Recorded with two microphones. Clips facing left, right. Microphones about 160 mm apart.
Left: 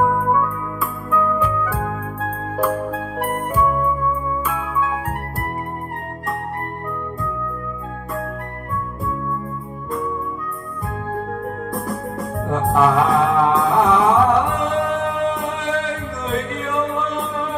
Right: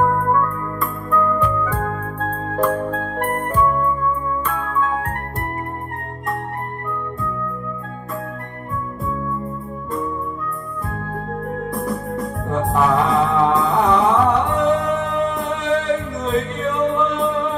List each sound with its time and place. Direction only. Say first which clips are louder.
0.0 s music: even; 5° left (ahead or behind)
11.4 s music: right 2 dB; centre (ahead or behind)